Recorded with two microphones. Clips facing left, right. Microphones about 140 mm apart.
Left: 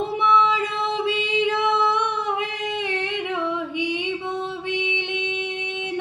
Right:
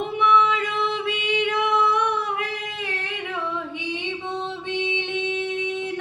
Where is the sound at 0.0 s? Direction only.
30° left (ahead or behind).